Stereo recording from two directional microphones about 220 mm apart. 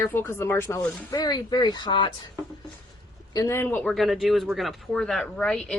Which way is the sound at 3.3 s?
15° left (ahead or behind).